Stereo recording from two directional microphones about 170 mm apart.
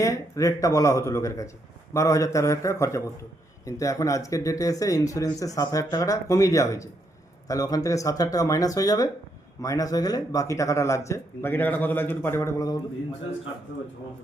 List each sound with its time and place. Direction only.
0.0 s speech: 20° left (ahead or behind)